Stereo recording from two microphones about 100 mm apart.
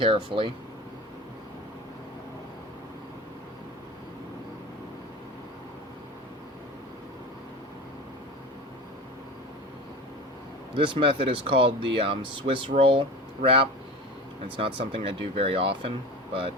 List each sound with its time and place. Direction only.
0.0 s speech: 60° right (ahead or behind)
10.8 s speech: 60° right (ahead or behind)